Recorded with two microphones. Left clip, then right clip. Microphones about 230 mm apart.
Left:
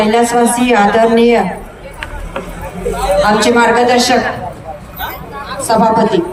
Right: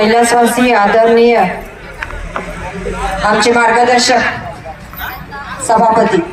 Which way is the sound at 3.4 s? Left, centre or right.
Right.